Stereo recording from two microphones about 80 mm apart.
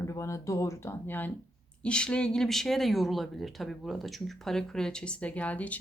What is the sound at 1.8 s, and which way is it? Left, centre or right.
Speech, centre.